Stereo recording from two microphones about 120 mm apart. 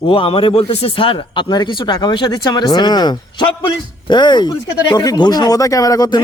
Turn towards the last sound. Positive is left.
turn(degrees=30)  # may be behind; listen again after turning